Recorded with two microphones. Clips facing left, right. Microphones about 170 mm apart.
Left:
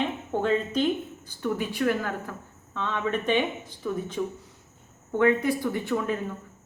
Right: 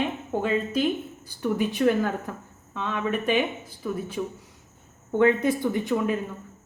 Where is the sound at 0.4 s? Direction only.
5° right (ahead or behind).